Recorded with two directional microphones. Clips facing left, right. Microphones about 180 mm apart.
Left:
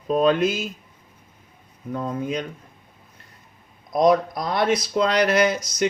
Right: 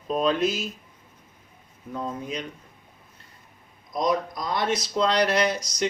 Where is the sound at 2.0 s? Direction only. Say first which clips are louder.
Left 5 dB; 55° left (ahead or behind).